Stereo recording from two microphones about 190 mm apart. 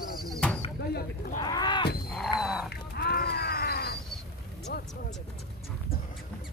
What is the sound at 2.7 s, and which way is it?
Wild animals, 60° left (ahead or behind).